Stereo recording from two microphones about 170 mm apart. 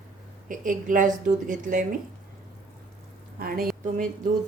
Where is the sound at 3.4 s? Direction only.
60° right (ahead or behind).